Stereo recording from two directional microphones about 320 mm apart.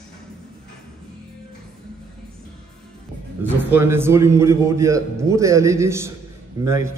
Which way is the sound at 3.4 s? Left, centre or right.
Centre.